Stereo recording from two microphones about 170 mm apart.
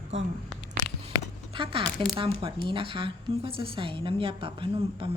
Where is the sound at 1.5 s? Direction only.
30° right (ahead or behind).